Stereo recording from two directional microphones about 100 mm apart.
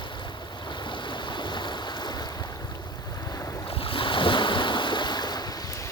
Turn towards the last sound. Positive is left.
turn(degrees=45)  # may be behind; listen again after turning